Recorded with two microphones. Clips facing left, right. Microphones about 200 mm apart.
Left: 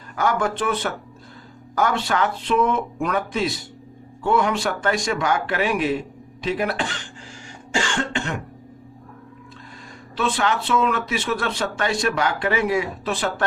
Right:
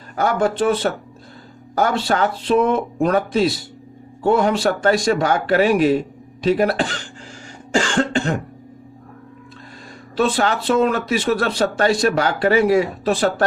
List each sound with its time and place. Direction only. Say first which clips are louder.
0.2 s speech: right 4 dB; 30° right (ahead or behind)
7.7 s cough: right 6 dB; 40° right (ahead or behind)
10.2 s speech: right 4 dB; 40° right (ahead or behind)